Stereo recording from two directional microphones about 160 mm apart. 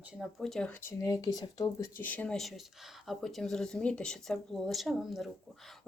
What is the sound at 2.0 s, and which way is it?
Speech, 10° left (ahead or behind).